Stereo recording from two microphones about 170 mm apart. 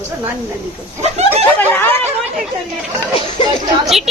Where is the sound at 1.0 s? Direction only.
40° right (ahead or behind).